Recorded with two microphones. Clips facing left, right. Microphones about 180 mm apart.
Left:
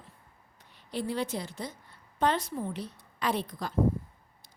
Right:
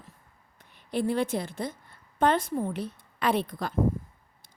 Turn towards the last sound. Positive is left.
turn(degrees=-60)  # may be behind; listen again after turning